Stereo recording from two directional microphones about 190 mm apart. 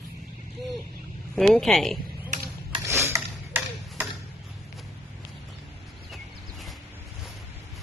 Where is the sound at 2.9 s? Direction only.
15° right (ahead or behind).